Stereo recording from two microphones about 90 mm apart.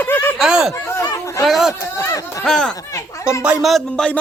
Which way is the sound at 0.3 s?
5° right (ahead or behind).